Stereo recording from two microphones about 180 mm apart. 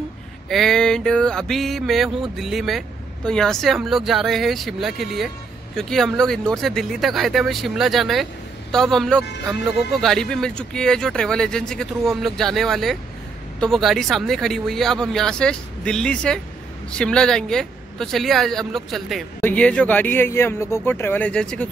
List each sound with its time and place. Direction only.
0.5 s speech: centre (ahead or behind)